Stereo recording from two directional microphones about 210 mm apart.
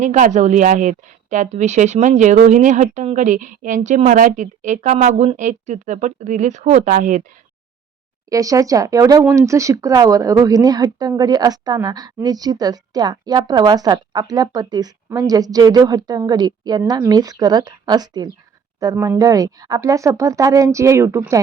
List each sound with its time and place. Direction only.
0.0 s a woman's voice: 35° right (ahead or behind)
8.3 s speech: 15° right (ahead or behind)